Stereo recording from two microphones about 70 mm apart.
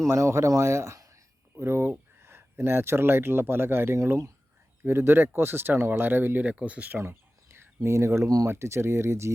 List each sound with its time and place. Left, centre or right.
0.0 s speech: right
1.5 s speech: right; by 6.9 s centre
6.9 s a sound: right
8.4 s speech: right